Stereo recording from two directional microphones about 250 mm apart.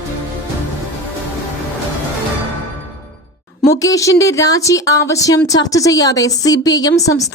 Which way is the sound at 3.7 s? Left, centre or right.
Centre.